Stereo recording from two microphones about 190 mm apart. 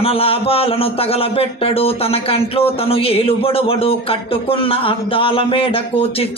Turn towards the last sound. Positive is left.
turn(degrees=30)  # may be behind; listen again after turning